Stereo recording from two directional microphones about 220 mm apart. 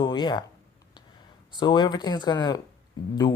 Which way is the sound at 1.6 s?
20° left (ahead or behind).